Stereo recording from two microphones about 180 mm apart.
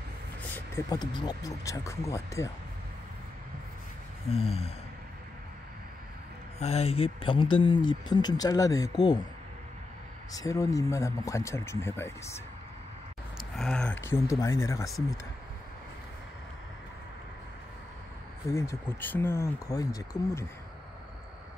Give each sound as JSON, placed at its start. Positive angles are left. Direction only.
{"t": 0.6, "sound": "speech", "side_deg": 20}
{"t": 4.3, "sound": "a sound", "side_deg": 35}
{"t": 6.6, "sound": "speech", "side_deg": 35}
{"t": 10.3, "sound": "speech", "side_deg": 20}
{"t": 13.4, "sound": "speech", "side_deg": 5}
{"t": 18.5, "sound": "speech", "side_deg": 15}